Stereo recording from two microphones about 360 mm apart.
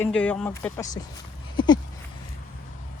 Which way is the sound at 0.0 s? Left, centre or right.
Centre.